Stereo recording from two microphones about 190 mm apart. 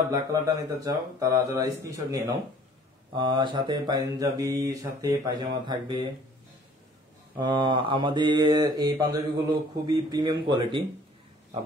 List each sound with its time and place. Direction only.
0.1 s speech: 20° right (ahead or behind)
3.2 s mantra: 25° right (ahead or behind)
7.3 s mantra: 25° right (ahead or behind)